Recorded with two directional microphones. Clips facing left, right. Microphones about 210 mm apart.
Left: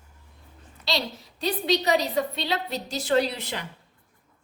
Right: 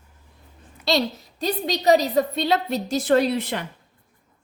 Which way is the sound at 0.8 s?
45° right (ahead or behind).